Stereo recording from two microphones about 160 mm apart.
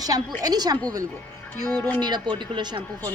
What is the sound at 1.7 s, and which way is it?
Speech, 10° left (ahead or behind).